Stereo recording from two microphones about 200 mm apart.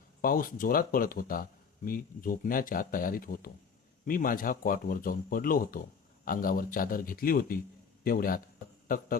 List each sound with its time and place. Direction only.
0.2 s speech: 45° left (ahead or behind)